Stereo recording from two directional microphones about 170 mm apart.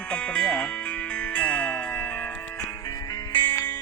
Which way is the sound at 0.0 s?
5° left (ahead or behind).